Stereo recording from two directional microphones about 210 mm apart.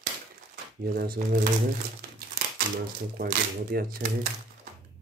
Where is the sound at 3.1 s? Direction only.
45° right (ahead or behind).